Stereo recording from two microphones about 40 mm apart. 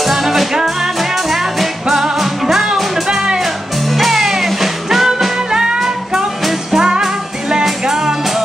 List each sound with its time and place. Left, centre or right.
0.0 s music: centre
5.5 s music: centre
5.8 s music: centre